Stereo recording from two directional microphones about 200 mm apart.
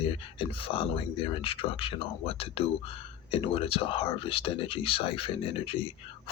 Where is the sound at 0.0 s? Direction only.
25° left (ahead or behind).